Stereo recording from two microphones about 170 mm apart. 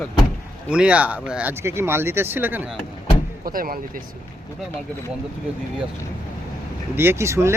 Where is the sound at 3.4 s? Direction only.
55° right (ahead or behind).